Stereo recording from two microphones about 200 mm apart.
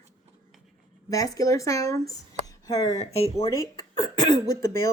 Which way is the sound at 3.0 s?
30° left (ahead or behind).